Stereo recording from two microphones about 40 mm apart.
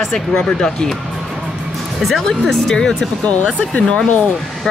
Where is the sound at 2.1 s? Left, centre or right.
Centre.